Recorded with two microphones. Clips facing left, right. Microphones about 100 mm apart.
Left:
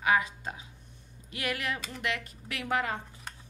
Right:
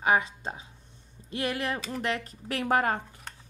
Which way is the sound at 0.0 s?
30° right (ahead or behind).